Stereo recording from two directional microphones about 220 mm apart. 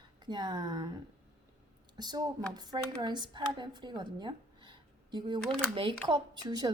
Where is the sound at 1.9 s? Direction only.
20° right (ahead or behind).